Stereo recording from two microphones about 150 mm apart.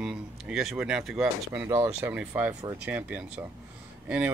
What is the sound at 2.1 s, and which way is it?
Speech, 5° right (ahead or behind).